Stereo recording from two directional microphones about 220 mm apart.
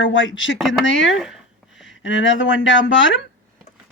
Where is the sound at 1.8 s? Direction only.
60° left (ahead or behind).